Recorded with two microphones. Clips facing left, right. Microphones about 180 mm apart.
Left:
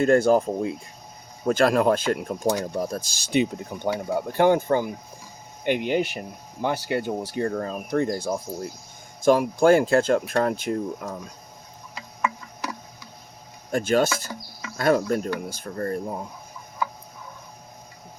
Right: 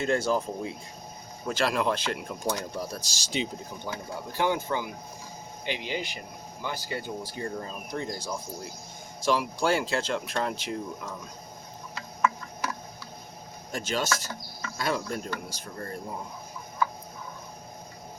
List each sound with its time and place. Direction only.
0.0 s speech: 50° left (ahead or behind)
13.7 s speech: 55° left (ahead or behind)